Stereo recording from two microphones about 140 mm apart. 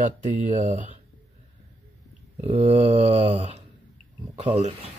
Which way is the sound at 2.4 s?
45° right (ahead or behind).